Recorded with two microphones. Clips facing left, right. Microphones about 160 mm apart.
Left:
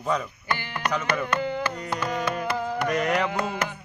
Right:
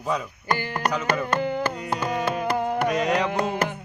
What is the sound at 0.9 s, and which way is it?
Speech, 10° right (ahead or behind).